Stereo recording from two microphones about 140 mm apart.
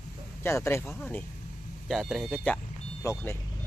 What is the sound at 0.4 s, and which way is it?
Speech, 20° left (ahead or behind).